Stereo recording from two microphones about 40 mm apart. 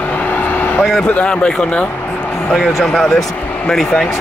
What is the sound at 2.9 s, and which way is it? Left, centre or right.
Speech, left.